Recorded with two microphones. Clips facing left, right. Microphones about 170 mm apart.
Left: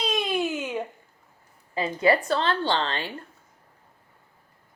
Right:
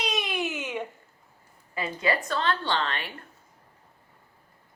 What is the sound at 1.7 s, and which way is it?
A woman's voice, 30° left (ahead or behind).